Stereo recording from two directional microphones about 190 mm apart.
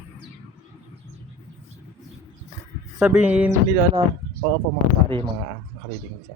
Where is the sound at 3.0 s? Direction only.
5° right (ahead or behind).